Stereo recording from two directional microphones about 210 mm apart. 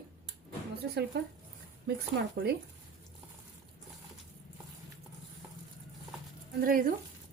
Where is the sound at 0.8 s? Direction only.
50° right (ahead or behind).